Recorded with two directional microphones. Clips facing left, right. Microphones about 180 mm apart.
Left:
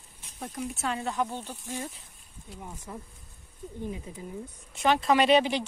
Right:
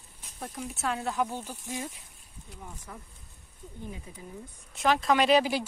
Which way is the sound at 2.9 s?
20° left (ahead or behind).